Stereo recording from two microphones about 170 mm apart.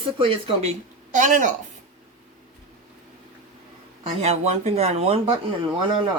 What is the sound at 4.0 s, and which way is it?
Speech, 40° right (ahead or behind).